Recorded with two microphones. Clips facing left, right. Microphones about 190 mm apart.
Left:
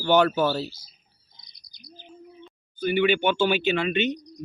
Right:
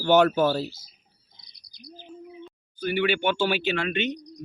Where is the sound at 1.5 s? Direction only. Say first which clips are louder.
Right 5 dB; 30° right (ahead or behind).